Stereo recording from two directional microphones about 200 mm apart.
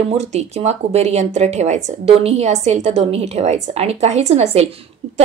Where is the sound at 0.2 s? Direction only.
35° right (ahead or behind).